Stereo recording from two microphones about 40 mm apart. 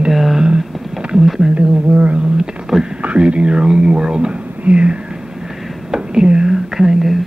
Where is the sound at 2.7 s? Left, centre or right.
Centre.